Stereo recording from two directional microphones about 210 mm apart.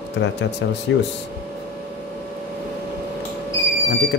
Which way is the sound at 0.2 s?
55° left (ahead or behind).